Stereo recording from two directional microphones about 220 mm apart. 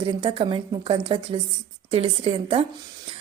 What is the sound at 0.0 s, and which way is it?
Speech, 20° right (ahead or behind).